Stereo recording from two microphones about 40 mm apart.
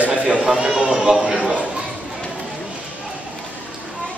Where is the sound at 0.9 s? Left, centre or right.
Centre.